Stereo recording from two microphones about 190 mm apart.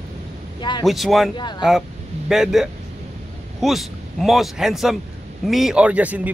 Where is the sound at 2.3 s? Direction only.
Centre (ahead or behind).